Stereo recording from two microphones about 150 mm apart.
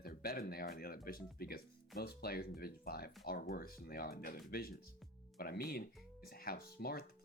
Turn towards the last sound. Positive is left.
turn(degrees=90)